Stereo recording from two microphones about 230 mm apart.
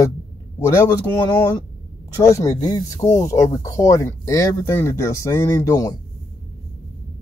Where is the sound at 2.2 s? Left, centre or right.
Centre.